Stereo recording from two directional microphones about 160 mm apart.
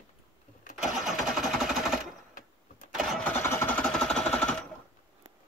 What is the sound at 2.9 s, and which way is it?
Engine starting, centre (ahead or behind).